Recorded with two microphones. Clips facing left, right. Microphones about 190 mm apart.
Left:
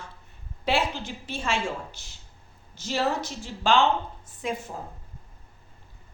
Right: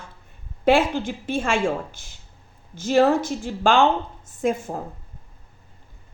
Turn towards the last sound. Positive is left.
turn(degrees=-50)  # may be behind; listen again after turning